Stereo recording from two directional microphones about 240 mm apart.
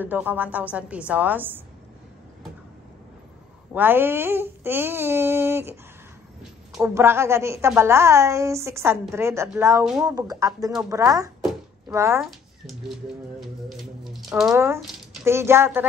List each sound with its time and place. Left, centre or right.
0.0 s a woman's voice: centre
3.7 s a woman's voice: centre
10.1 s a woman's voice: centre
12.2 s a woman's voice: centre